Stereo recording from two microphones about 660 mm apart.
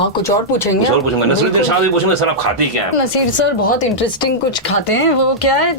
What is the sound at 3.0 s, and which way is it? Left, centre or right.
Speech, left.